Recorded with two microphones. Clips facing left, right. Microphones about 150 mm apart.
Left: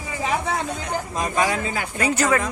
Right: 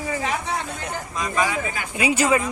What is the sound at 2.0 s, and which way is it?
Speech, 10° right (ahead or behind).